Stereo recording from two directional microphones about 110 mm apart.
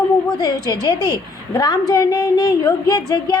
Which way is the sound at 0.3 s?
35° left (ahead or behind).